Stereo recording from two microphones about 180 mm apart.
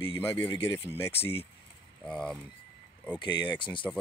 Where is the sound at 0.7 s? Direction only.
15° left (ahead or behind).